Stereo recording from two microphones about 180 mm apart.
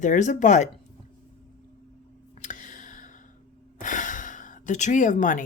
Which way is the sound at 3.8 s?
45° left (ahead or behind).